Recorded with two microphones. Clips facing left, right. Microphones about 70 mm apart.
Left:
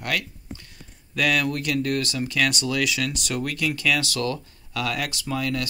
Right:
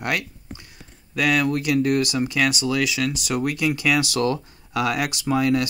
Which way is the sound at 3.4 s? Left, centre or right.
Centre.